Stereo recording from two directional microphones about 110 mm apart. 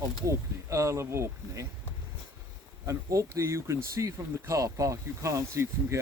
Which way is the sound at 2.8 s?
30° right (ahead or behind).